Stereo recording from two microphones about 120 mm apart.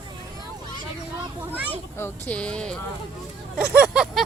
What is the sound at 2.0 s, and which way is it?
Speech, 15° left (ahead or behind).